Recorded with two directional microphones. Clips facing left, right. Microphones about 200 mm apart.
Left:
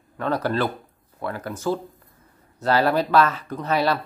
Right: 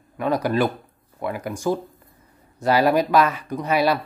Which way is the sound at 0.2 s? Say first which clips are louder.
Right 3 dB; 10° right (ahead or behind).